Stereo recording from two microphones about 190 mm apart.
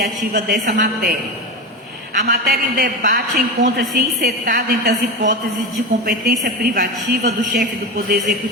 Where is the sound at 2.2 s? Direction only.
60° right (ahead or behind).